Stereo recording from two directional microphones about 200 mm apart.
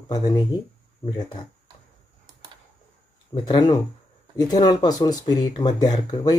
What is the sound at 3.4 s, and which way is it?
Speech, 20° left (ahead or behind).